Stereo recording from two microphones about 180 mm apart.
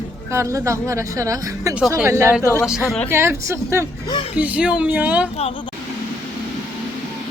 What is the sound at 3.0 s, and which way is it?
Speech, 15° right (ahead or behind).